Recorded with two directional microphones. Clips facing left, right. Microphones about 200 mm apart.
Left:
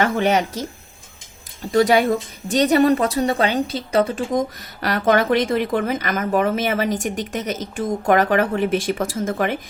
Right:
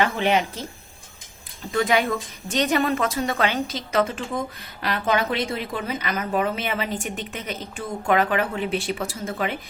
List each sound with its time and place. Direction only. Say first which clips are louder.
0.0 s a woman's voice: left 3 dB; 40° left (ahead or behind)
1.6 s a woman's voice: left 6 dB; 40° left (ahead or behind)